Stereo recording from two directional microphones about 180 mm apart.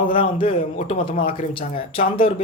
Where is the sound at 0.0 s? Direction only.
30° left (ahead or behind).